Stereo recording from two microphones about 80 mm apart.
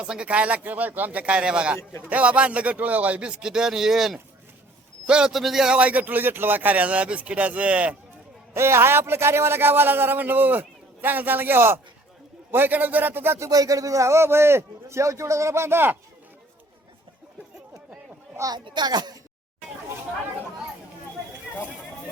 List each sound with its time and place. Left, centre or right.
0.0 s a man's voice: centre
8.5 s speech: right
13.5 s a man's voice: right
18.5 s speech: right